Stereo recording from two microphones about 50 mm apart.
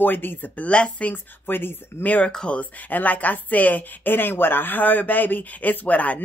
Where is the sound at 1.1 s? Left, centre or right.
Left.